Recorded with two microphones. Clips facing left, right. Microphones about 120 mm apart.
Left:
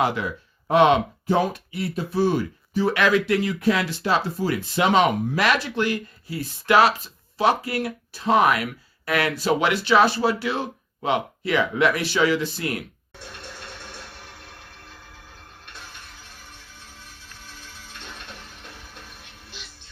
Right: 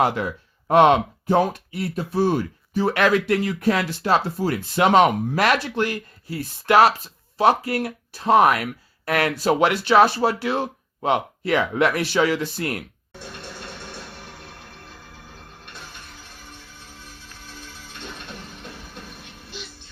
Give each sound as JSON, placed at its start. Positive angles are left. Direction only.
{"t": 0.0, "sound": "speech", "side_deg": -45}